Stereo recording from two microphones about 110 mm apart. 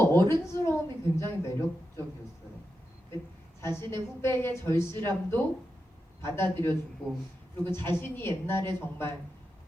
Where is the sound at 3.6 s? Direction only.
25° left (ahead or behind).